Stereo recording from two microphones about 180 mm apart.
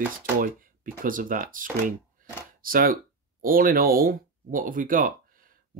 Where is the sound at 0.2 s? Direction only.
50° right (ahead or behind).